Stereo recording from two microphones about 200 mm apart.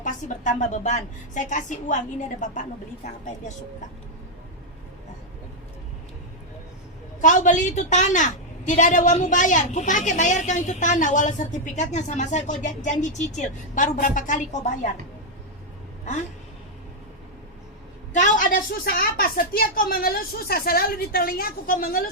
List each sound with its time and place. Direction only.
0.0 s a woman's voice: 40° left (ahead or behind)
7.2 s a woman's voice: 40° left (ahead or behind)
18.1 s a woman's voice: 40° left (ahead or behind)